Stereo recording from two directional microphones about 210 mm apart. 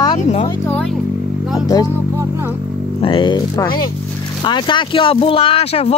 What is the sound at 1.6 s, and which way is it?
Speech, 20° left (ahead or behind).